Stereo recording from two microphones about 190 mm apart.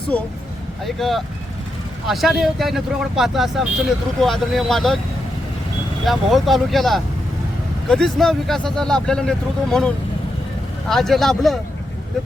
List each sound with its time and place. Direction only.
0.9 s speech: centre (ahead or behind)
6.1 s speech: centre (ahead or behind)